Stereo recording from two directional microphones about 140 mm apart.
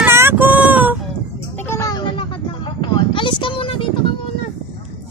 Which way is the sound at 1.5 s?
15° left (ahead or behind).